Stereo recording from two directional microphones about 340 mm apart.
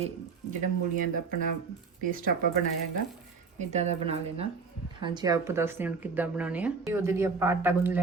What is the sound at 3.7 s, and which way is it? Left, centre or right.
Speech, centre.